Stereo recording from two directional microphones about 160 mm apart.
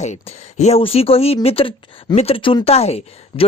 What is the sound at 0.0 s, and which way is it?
Speech, 45° left (ahead or behind).